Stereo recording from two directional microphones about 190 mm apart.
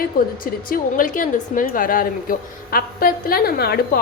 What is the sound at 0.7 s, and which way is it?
A woman's voice, 45° left (ahead or behind).